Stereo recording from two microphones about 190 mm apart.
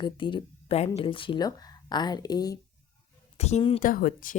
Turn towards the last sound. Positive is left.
turn(degrees=45)  # may be behind; listen again after turning